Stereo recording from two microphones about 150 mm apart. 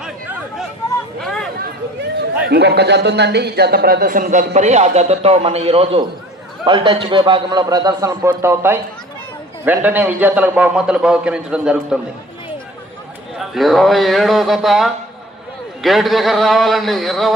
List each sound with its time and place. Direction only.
1.2 s a sound: 5° left (ahead or behind)
2.5 s a man's voice: 90° right; by 11.9 s 5° right (ahead or behind)
13.4 s a man's voice: centre (ahead or behind)